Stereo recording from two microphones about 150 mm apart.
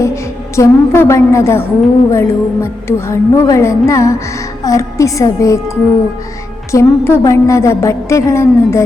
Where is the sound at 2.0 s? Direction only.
15° left (ahead or behind).